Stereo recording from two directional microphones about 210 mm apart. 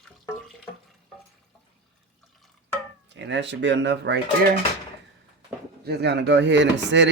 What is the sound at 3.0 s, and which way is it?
Speech, 60° right (ahead or behind).